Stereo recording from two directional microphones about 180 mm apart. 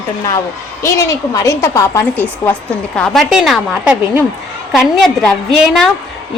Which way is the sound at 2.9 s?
5° left (ahead or behind).